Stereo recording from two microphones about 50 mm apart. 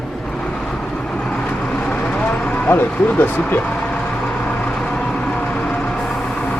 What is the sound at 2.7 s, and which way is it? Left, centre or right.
Speech, left.